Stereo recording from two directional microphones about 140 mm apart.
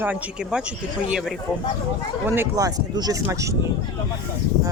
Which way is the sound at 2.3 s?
20° right (ahead or behind).